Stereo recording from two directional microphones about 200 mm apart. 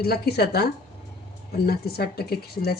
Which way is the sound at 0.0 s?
50° left (ahead or behind).